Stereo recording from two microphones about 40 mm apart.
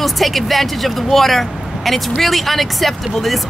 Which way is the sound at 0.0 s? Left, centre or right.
Centre.